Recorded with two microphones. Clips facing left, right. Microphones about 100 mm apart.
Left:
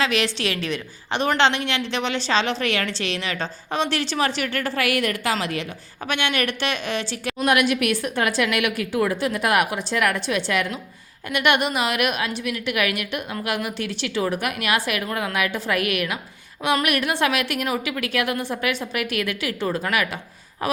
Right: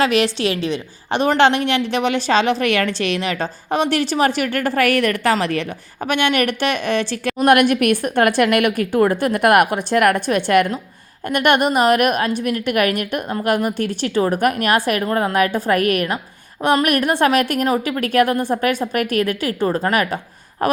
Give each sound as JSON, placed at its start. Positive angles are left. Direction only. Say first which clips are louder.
{"t": 0.0, "sound": "a woman's voice", "louder": "right 6 dB", "side_deg": -40}
{"t": 1.1, "sound": "a woman's voice", "louder": "right 5 dB", "side_deg": -45}
{"t": 6.1, "sound": "a woman's voice", "louder": "right 6 dB", "side_deg": -50}